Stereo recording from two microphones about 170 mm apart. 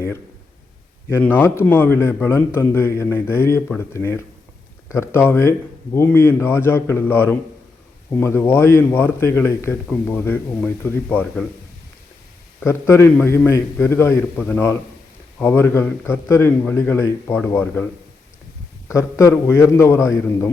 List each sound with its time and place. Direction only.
1.2 s a man's voice: 10° left (ahead or behind)
12.6 s a man's voice: 10° left (ahead or behind)
18.9 s a man's voice: 15° left (ahead or behind)